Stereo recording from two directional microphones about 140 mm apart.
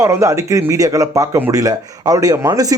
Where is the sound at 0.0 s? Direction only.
20° right (ahead or behind).